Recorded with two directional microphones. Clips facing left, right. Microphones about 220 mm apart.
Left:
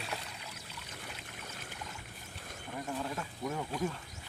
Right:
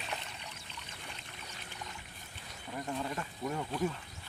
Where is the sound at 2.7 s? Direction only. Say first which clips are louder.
Right 1 dB; centre (ahead or behind).